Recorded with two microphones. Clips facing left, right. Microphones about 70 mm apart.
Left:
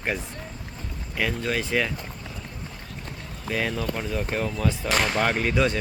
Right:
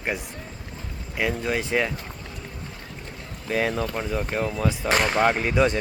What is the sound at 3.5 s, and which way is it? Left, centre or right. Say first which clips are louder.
Speech: right 3 dB; right.